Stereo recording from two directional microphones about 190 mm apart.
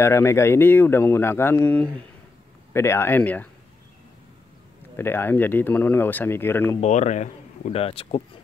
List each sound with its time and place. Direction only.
0.0 s speech: 15° left (ahead or behind)
4.9 s speech: 10° left (ahead or behind)
6.8 s speech: 40° left (ahead or behind)